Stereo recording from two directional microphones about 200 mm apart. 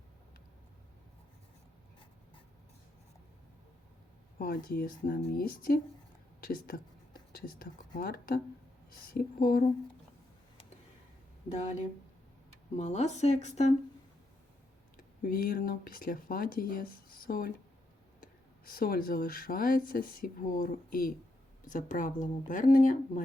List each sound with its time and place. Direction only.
4.4 s speech: 45° left (ahead or behind)
12.7 s speech: 35° left (ahead or behind)
14.9 s speech: 45° left (ahead or behind)